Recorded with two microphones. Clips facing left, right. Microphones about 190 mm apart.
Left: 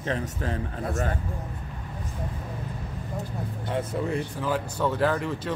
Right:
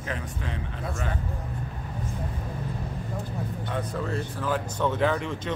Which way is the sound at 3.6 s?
25° left (ahead or behind).